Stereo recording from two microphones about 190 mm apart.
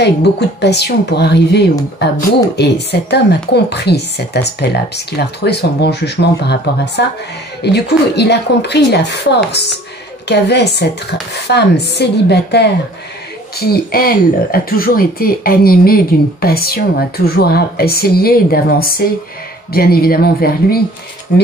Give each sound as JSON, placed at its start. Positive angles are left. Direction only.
{"t": 0.0, "sound": "a woman's voice", "side_deg": 60}